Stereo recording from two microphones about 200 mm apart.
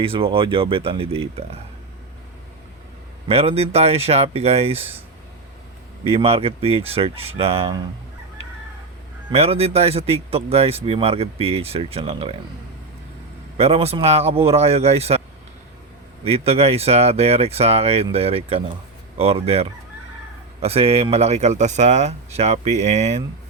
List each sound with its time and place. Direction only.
0.0 s speech: 25° right (ahead or behind)
3.2 s speech: 30° right (ahead or behind)
6.1 s speech: 30° right (ahead or behind)
9.3 s speech: 30° right (ahead or behind)
13.6 s speech: 30° right (ahead or behind)
16.2 s speech: 30° right (ahead or behind)